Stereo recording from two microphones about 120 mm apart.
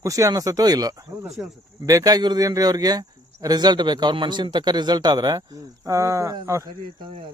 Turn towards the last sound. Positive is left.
turn(degrees=-25)  # may be behind; listen again after turning